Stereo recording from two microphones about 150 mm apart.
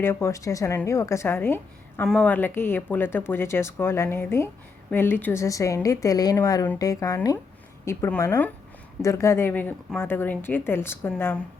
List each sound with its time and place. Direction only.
0.0 s a woman's voice: 15° left (ahead or behind)